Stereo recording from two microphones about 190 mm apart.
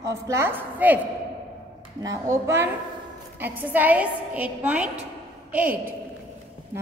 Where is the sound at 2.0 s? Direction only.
15° right (ahead or behind).